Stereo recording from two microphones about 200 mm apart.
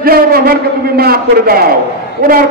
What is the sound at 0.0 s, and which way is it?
A man's voice, 50° right (ahead or behind).